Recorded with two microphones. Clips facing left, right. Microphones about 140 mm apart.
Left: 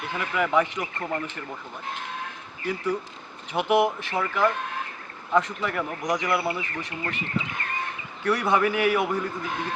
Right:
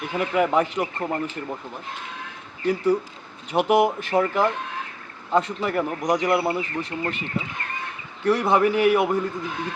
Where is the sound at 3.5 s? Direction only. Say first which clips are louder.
Right 3 dB; 40° right (ahead or behind).